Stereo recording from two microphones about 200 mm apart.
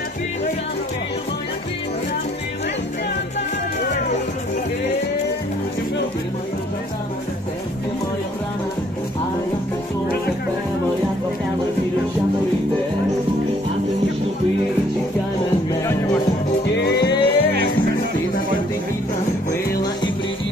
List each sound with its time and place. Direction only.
15.7 s music: 15° left (ahead or behind)
16.8 s music: 55° left (ahead or behind)
17.1 s music: 25° left (ahead or behind)